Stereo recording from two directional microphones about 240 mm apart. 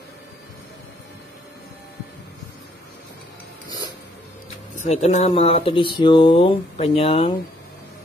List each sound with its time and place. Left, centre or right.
4.7 s speech: left